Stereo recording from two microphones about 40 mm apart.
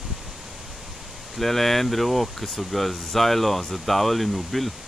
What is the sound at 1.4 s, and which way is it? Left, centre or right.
Speech, centre.